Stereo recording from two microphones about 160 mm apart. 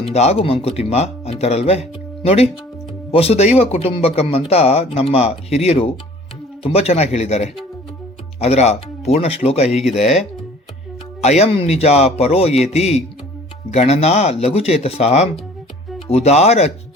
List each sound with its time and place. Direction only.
0.1 s speech: 40° left (ahead or behind)
11.2 s speech: 40° left (ahead or behind)